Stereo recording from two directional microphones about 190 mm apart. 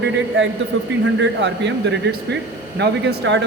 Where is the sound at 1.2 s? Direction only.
70° right (ahead or behind).